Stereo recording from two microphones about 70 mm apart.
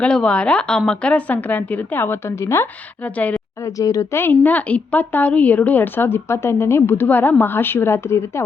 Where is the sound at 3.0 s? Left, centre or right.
Left.